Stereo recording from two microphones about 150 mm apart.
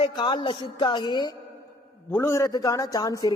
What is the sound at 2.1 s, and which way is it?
A man's voice, 20° left (ahead or behind).